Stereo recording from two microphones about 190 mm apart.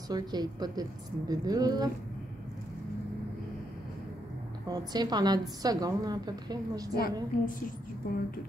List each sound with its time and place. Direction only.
0.1 s a woman's voice: 20° right (ahead or behind)
4.6 s a woman's voice: 20° right (ahead or behind)
7.0 s a woman's voice: 45° left (ahead or behind)